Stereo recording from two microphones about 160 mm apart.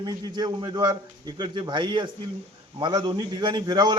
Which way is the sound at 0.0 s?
25° right (ahead or behind).